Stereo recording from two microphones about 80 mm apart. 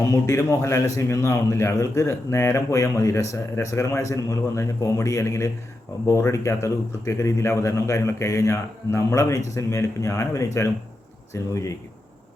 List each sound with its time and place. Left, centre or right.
0.1 s speech: left